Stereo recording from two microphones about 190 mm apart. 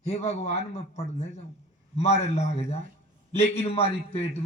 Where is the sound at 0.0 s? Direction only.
35° left (ahead or behind).